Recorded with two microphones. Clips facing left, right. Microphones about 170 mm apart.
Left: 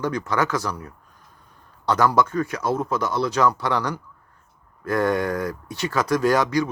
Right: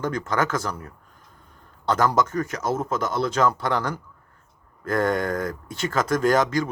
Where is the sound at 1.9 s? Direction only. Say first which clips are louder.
Left 2 dB; 45° right (ahead or behind).